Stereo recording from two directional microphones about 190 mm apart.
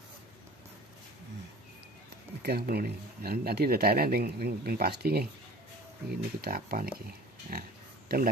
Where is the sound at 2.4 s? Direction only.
55° right (ahead or behind).